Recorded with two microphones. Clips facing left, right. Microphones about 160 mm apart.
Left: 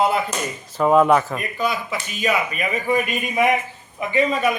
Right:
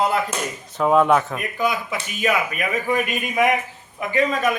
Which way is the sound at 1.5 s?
15° right (ahead or behind).